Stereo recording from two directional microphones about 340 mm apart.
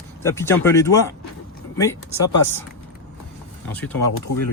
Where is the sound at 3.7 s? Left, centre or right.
Centre.